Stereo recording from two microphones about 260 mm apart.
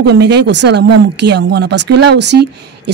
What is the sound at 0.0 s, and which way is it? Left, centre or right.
Speech, right.